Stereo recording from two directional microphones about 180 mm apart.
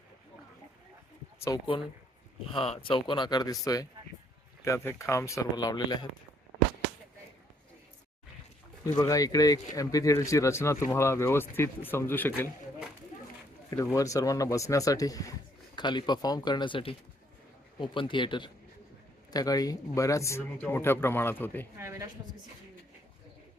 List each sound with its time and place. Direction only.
1.5 s speech: 30° left (ahead or behind)
8.9 s speech: 20° left (ahead or behind)
13.7 s speech: 15° left (ahead or behind)
21.8 s a woman's voice: 15° right (ahead or behind)